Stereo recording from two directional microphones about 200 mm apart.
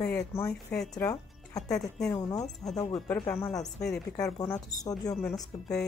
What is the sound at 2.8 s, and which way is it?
Speech, 20° left (ahead or behind).